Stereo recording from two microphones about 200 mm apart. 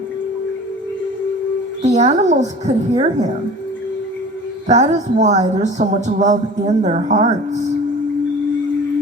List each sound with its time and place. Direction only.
2.0 s speech: 35° right (ahead or behind)
4.7 s speech: 35° right (ahead or behind)